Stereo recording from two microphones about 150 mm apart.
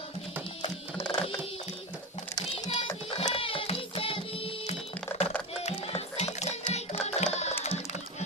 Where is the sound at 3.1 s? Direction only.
40° left (ahead or behind).